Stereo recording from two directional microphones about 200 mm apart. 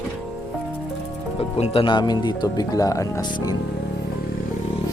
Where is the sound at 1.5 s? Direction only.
30° left (ahead or behind).